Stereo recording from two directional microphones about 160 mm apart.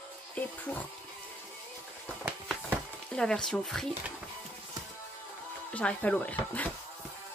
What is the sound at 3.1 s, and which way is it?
Speech, 5° left (ahead or behind).